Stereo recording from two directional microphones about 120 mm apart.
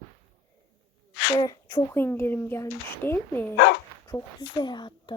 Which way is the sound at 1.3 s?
35° left (ahead or behind).